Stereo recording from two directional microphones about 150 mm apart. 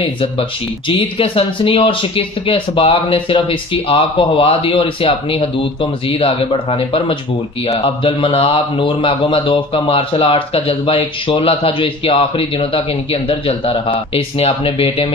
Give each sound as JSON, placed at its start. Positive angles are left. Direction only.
{"t": 0.0, "sound": "a man's voice", "side_deg": 40}